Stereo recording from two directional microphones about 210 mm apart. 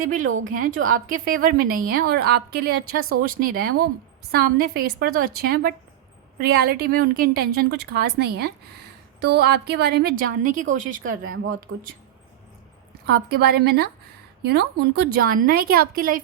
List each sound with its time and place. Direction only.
0.0 s a woman's voice: 40° right (ahead or behind)
3.0 s speech: 90° right
3.2 s a woman's voice: 45° right (ahead or behind)
11.7 s speech: 60° right (ahead or behind)
13.1 s a woman's voice: 50° right (ahead or behind)